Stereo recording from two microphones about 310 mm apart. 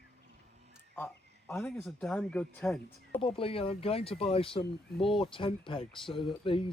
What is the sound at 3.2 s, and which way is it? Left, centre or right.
A man's voice, centre.